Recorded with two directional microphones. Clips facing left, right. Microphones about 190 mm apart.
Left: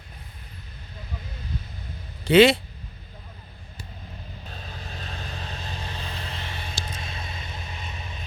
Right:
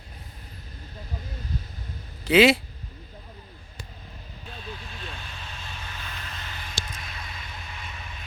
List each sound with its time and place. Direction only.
2.2 s speech: 5° right (ahead or behind)
4.6 s vehicle: 40° left (ahead or behind); by 8.0 s 20° left (ahead or behind)